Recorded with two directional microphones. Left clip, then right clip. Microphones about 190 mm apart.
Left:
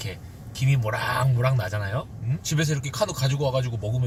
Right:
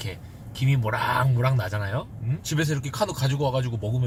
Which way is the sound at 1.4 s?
10° right (ahead or behind).